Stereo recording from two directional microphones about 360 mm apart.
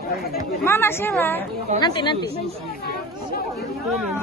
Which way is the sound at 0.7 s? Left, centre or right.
Centre.